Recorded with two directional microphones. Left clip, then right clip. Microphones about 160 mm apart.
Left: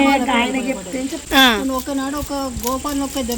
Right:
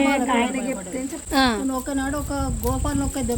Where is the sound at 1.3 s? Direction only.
5° left (ahead or behind).